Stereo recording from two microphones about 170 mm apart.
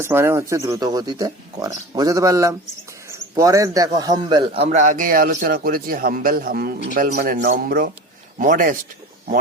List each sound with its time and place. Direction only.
0.0 s a man's voice: 15° right (ahead or behind); by 8.7 s 50° right (ahead or behind)